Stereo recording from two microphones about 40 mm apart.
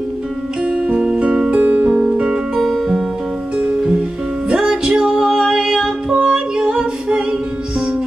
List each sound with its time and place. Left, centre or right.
0.7 s music: right
1.5 s music: right
2.5 s music: centre
4.5 s music: right